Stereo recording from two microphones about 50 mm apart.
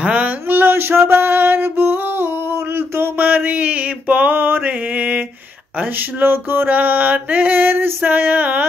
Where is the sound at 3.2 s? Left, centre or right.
Right.